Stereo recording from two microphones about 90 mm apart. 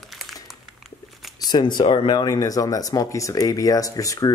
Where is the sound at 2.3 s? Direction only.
40° left (ahead or behind).